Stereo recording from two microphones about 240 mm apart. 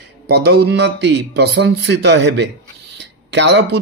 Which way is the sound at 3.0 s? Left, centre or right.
Right.